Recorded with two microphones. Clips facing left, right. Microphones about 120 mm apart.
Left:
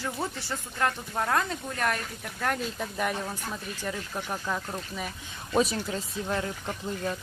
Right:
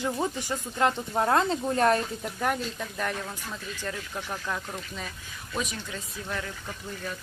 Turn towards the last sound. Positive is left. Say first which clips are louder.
# left 5 dB
turn(degrees=25)  # may be behind; listen again after turning